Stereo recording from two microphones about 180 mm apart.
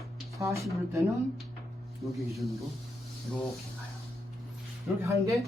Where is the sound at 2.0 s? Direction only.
Centre (ahead or behind).